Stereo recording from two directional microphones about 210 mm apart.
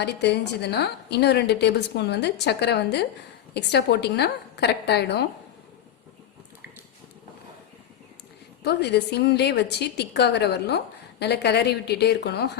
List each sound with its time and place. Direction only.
0.0 s a woman's voice: 50° left (ahead or behind)
8.6 s a woman's voice: 50° left (ahead or behind)